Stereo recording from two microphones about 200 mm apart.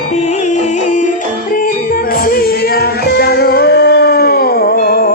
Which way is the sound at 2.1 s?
45° left (ahead or behind).